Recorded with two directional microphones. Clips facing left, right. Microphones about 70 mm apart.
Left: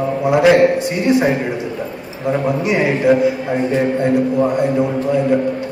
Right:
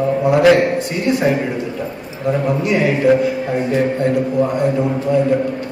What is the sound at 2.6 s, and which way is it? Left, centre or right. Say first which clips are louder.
Speech: even; centre.